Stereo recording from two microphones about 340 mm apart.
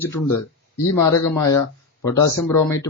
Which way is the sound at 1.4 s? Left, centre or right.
Centre.